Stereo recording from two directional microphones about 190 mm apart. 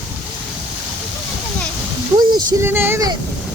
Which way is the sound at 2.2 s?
20° right (ahead or behind).